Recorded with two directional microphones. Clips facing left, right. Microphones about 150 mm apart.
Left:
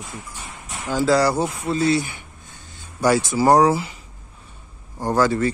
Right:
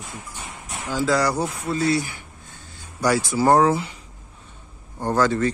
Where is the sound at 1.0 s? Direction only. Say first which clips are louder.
Left 3 dB; 30° left (ahead or behind); by 3.7 s 10° left (ahead or behind).